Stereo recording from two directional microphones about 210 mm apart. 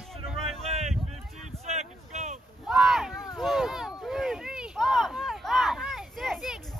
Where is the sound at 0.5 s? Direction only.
30° right (ahead or behind).